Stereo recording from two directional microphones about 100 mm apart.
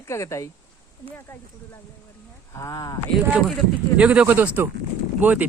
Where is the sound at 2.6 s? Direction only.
35° left (ahead or behind).